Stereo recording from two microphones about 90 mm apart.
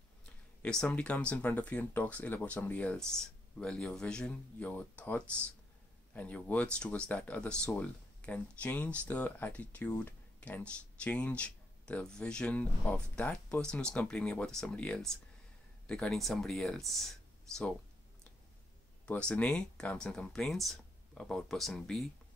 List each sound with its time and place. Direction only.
0.6 s speech: 10° left (ahead or behind)
19.0 s speech: 15° left (ahead or behind)